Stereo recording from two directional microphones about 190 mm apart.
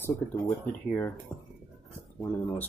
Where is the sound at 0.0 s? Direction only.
15° left (ahead or behind).